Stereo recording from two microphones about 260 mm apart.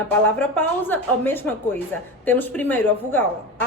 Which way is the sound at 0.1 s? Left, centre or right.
Centre.